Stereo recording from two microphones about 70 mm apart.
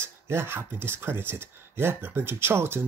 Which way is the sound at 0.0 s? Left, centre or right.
Right.